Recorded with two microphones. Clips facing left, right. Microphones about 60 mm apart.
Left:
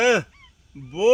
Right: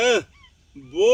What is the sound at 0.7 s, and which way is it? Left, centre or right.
Speech, left.